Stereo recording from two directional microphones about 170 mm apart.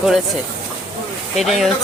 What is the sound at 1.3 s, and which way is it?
Speech, centre (ahead or behind).